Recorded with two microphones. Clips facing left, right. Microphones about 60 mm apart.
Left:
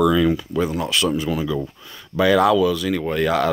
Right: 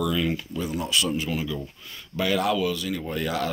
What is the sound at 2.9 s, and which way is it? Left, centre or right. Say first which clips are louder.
Speech: left 7 dB; left.